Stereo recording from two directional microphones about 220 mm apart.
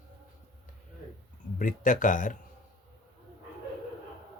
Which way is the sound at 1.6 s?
35° left (ahead or behind).